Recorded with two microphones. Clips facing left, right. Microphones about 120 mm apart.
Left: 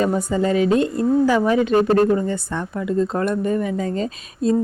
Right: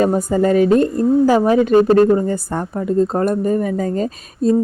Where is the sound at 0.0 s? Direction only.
40° right (ahead or behind).